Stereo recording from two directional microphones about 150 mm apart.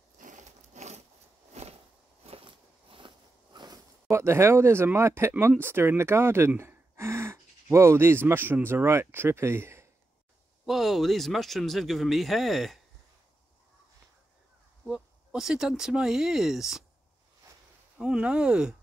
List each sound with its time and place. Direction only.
0.2 s a sound: 55° right (ahead or behind)
1.5 s walk: 45° right (ahead or behind)
2.2 s a sound: 40° right (ahead or behind)
3.5 s speech: 25° right (ahead or behind)
10.6 s speech: centre (ahead or behind)
14.9 s speech: 5° right (ahead or behind)
17.9 s speech: 5° right (ahead or behind)